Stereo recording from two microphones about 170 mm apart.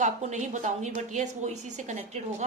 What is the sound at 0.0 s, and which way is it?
A woman's voice, 45° right (ahead or behind).